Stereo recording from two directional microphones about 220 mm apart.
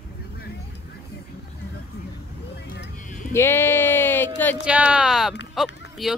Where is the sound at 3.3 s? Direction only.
10° left (ahead or behind).